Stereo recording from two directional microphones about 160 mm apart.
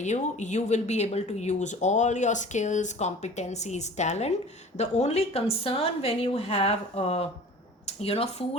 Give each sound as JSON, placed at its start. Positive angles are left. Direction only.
{"t": 0.0, "sound": "speech", "side_deg": 45}